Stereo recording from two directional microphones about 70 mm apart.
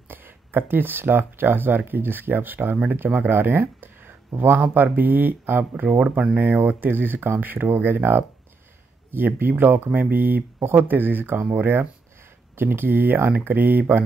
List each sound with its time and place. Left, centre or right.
0.1 s speech: right
5.9 s speech: centre
6.3 s speech: right